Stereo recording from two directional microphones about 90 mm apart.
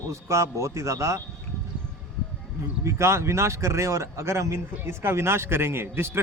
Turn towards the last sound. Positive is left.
turn(degrees=-25)  # may be behind; listen again after turning